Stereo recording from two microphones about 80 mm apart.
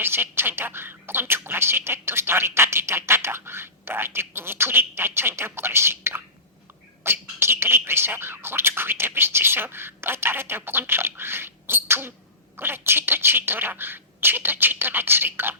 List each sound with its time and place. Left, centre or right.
0.0 s speech: right